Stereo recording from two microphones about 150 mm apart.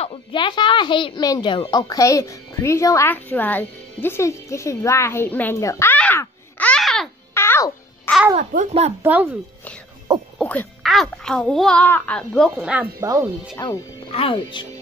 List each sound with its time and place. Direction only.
0.0 s a woman's voice: 35° left (ahead or behind); by 5.9 s 20° left (ahead or behind)
5.9 s babbling: 10° left (ahead or behind)
7.3 s music: 15° left (ahead or behind)
8.4 s a child's voice: 50° right (ahead or behind)
9.0 s speech: 10° right (ahead or behind)
10.1 s speech: 30° right (ahead or behind)
10.4 s a child's voice: 10° left (ahead or behind); by 12.9 s 10° right (ahead or behind)
13.0 s speech: 20° right (ahead or behind)
13.6 s speech: 30° left (ahead or behind)